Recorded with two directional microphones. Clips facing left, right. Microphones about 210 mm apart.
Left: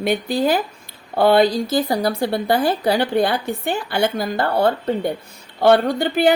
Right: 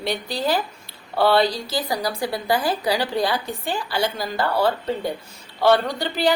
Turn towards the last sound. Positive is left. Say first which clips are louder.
# left 5 dB
turn(degrees=55)  # may be behind; listen again after turning